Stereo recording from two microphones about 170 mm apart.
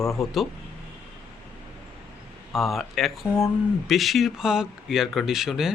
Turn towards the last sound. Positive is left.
turn(degrees=0)  # may be behind; listen again after turning